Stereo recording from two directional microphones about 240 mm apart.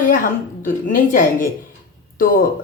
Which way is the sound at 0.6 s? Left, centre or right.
Left.